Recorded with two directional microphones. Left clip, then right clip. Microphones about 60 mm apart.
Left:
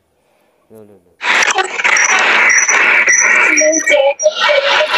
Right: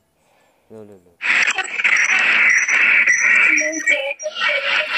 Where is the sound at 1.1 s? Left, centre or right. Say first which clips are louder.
Left 5 dB; left.